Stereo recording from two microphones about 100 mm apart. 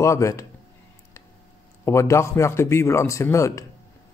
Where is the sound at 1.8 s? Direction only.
30° left (ahead or behind).